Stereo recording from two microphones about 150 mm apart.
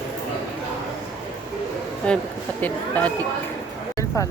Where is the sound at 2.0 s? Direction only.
10° left (ahead or behind).